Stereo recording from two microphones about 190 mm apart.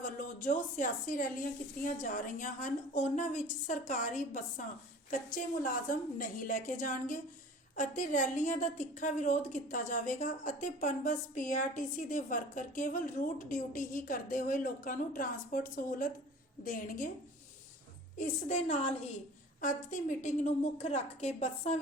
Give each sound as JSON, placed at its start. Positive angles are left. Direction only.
{"t": 0.0, "sound": "a woman's voice", "side_deg": 45}
{"t": 18.2, "sound": "a woman's voice", "side_deg": 35}